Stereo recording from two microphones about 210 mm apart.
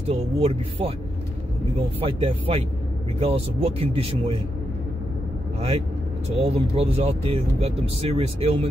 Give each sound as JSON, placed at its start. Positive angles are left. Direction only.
{"t": 0.1, "sound": "speech", "side_deg": -30}
{"t": 2.0, "sound": "speech", "side_deg": -25}
{"t": 5.6, "sound": "speech", "side_deg": -25}